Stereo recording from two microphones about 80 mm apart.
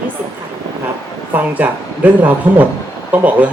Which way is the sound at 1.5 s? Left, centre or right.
Right.